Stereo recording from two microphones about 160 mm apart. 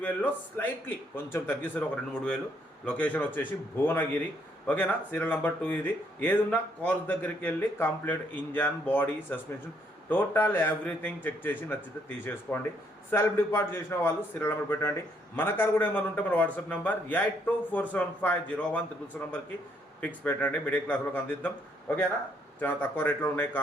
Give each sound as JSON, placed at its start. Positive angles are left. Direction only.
{"t": 0.0, "sound": "a man's voice", "side_deg": 10}